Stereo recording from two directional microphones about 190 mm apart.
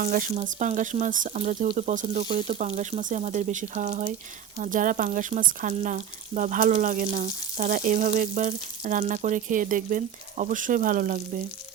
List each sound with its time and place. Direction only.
0.0 s speech: 40° right (ahead or behind)